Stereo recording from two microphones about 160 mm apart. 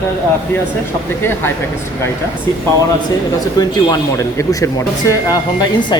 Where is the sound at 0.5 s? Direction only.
15° left (ahead or behind).